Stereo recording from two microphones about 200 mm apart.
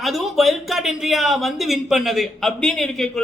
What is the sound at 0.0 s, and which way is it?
Speech, centre (ahead or behind).